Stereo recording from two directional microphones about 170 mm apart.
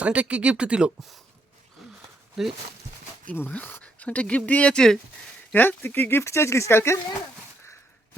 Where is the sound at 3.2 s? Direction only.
10° left (ahead or behind).